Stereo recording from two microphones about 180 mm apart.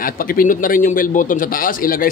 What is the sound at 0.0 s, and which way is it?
A man's voice, 50° left (ahead or behind).